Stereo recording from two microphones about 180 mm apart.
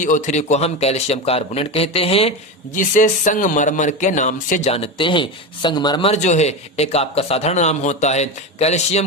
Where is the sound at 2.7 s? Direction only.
45° left (ahead or behind).